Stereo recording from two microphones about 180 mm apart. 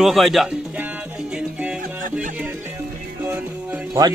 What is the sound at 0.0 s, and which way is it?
Music, centre (ahead or behind).